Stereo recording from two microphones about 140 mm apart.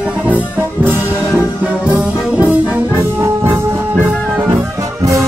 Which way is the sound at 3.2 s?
20° right (ahead or behind).